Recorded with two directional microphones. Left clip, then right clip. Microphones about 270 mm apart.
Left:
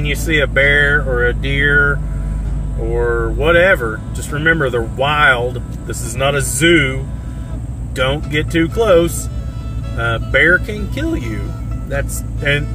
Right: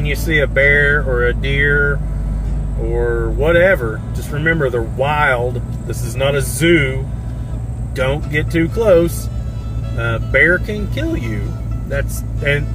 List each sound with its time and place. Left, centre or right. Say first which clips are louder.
0.0 s speech: left 1 dB; left
6.7 s speech: right 1 dB; left
11.9 s speech: even; left